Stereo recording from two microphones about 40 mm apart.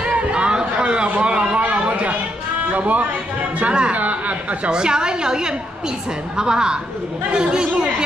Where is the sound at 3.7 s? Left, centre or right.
Right.